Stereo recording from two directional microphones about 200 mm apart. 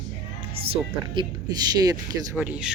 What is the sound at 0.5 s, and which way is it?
Speech, 30° right (ahead or behind).